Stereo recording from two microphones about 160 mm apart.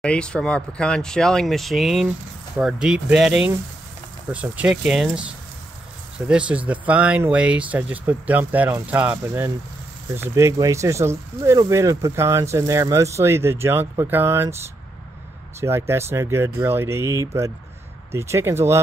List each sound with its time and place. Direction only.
0.0 s speech: 5° left (ahead or behind); by 14.6 s 15° right (ahead or behind)
15.6 s speech: 15° right (ahead or behind)